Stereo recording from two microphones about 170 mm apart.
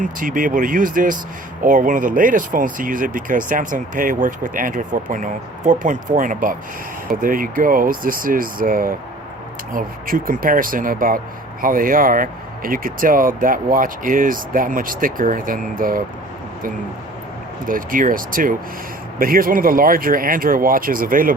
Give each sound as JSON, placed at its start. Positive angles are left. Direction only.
{"t": 0.0, "sound": "speech", "side_deg": -55}
{"t": 17.7, "sound": "speech", "side_deg": -55}